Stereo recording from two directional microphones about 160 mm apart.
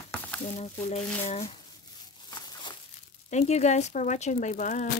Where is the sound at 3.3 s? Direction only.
45° left (ahead or behind).